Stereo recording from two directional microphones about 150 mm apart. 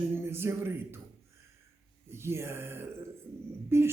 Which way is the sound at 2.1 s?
15° right (ahead or behind).